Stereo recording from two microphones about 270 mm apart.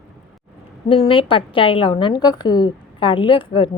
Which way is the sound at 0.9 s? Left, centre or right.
Centre.